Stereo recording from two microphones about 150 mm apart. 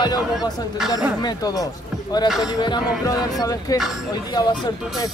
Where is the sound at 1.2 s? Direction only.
25° left (ahead or behind).